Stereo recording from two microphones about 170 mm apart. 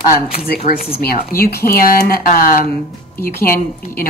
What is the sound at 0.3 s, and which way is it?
A woman's voice, 65° left (ahead or behind).